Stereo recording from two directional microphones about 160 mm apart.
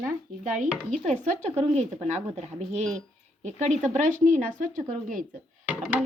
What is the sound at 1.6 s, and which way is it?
Speech, 40° right (ahead or behind).